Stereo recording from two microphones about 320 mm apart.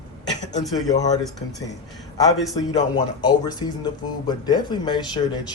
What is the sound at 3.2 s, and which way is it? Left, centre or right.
Speech, centre.